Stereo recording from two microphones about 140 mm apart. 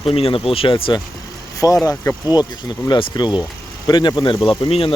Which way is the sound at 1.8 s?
30° left (ahead or behind).